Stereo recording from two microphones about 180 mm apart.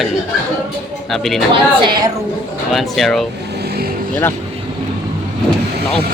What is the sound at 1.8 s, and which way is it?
Speech, 25° right (ahead or behind).